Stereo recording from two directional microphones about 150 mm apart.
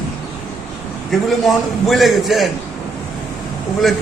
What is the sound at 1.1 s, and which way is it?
A man's voice, centre (ahead or behind).